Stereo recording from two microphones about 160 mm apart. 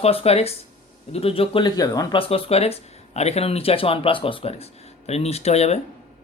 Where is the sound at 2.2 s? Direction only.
35° left (ahead or behind).